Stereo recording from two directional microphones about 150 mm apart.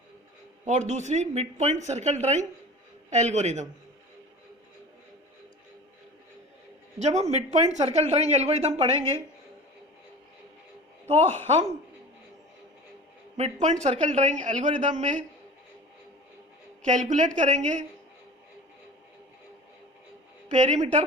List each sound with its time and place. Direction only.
0.6 s speech: 50° right (ahead or behind)
7.0 s speech: 45° right (ahead or behind)
11.1 s speech: 45° right (ahead or behind)
13.3 s speech: 45° right (ahead or behind)
16.8 s speech: 55° right (ahead or behind)
20.5 s speech: 50° right (ahead or behind)